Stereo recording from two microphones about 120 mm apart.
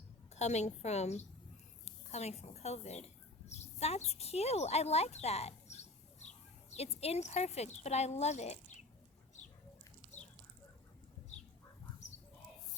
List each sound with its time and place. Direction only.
0.3 s a woman's voice: 70° left (ahead or behind)